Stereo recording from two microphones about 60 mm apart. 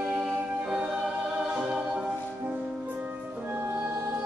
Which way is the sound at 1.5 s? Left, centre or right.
Centre.